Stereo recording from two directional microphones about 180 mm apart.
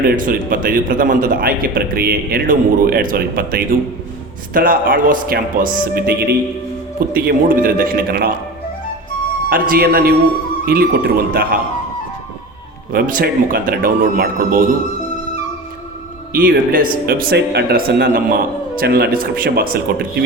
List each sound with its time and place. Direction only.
0.2 s a man's voice: 50° right (ahead or behind)
9.5 s speech: 55° right (ahead or behind)
12.9 s a man's voice: 55° right (ahead or behind)
16.3 s speech: 50° right (ahead or behind)